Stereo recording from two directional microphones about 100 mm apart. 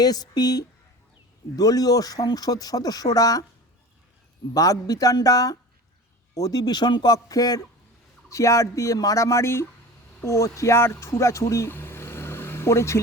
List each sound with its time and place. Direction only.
0.0 s speech: 40° left (ahead or behind)
4.5 s speech: 35° left (ahead or behind)